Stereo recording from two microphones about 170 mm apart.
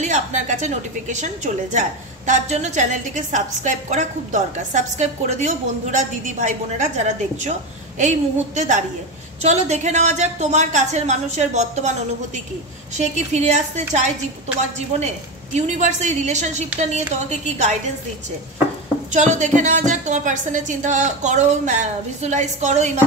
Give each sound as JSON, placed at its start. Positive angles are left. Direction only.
{"t": 0.0, "sound": "a woman's voice", "side_deg": -45}
{"t": 12.9, "sound": "a woman's voice", "side_deg": -40}
{"t": 15.5, "sound": "a woman's voice", "side_deg": -45}
{"t": 19.1, "sound": "a woman's voice", "side_deg": -45}